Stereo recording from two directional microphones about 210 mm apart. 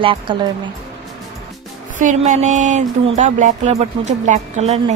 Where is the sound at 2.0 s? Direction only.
35° right (ahead or behind).